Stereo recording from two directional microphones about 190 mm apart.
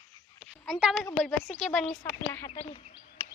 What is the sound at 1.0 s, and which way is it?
Speech, 5° left (ahead or behind).